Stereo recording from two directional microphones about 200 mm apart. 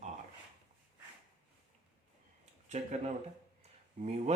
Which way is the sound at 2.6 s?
35° right (ahead or behind).